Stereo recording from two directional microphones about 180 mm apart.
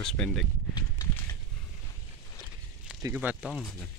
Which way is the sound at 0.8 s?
20° left (ahead or behind).